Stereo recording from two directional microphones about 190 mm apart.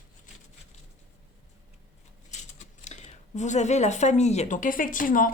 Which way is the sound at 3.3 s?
40° left (ahead or behind).